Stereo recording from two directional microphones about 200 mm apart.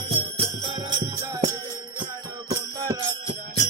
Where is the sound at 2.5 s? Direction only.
15° right (ahead or behind).